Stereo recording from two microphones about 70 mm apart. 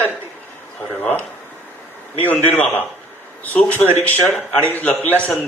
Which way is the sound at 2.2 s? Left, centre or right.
Left.